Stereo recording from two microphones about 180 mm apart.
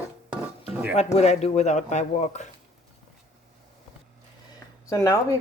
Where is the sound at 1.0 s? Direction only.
35° left (ahead or behind).